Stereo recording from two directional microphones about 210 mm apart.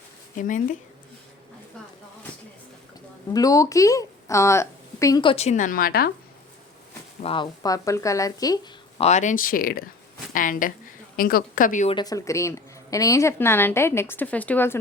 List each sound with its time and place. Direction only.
0.3 s speech: 40° left (ahead or behind)
3.3 s a woman's voice: 15° left (ahead or behind); by 6.1 s 45° left (ahead or behind)
7.2 s a woman's voice: 25° left (ahead or behind)
9.0 s speech: 35° left (ahead or behind)
11.9 s a woman's voice: 15° left (ahead or behind)